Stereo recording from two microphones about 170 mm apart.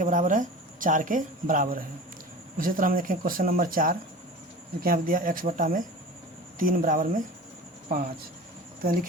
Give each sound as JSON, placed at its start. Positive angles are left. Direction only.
{"t": 0.0, "sound": "speech", "side_deg": -50}
{"t": 8.8, "sound": "speech", "side_deg": -55}